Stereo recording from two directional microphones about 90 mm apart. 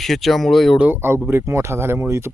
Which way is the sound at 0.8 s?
25° right (ahead or behind).